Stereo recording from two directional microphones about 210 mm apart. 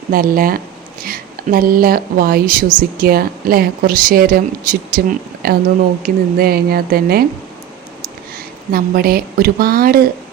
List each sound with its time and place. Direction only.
0.1 s a woman's voice: 45° right (ahead or behind)
8.7 s a woman's voice: 45° right (ahead or behind)